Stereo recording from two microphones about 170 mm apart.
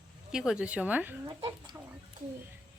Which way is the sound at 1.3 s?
25° right (ahead or behind).